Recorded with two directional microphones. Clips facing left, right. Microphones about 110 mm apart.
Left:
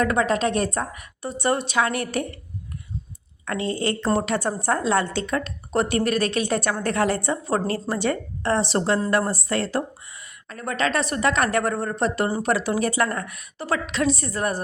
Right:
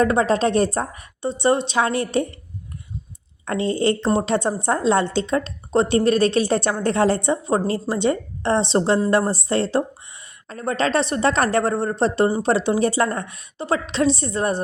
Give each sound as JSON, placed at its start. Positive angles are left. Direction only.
{"t": 0.0, "sound": "a woman's voice", "side_deg": -30}
{"t": 3.4, "sound": "a woman's voice", "side_deg": -30}